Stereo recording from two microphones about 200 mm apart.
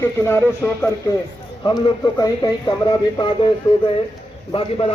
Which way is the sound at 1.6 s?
25° left (ahead or behind).